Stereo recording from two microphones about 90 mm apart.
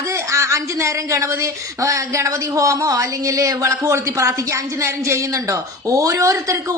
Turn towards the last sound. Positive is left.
turn(degrees=-35)  # may be behind; listen again after turning